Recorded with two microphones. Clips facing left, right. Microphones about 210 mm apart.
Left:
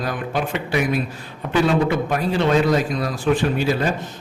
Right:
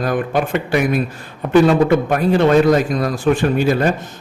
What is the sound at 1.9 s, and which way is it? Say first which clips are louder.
A man's voice: right 6 dB; 50° right (ahead or behind).